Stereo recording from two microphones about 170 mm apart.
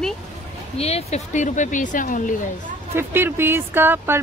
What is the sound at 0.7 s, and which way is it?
Speech, 35° left (ahead or behind).